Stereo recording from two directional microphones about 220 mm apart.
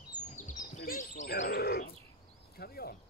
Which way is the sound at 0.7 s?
35° left (ahead or behind).